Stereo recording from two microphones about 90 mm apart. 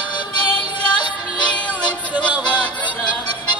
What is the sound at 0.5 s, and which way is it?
Music, 60° left (ahead or behind).